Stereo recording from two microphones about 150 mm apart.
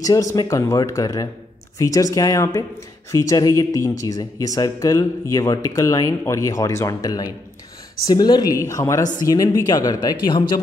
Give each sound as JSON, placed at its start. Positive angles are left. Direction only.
{"t": 0.0, "sound": "speech", "side_deg": 20}